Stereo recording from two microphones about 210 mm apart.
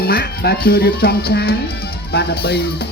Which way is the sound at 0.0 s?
45° left (ahead or behind).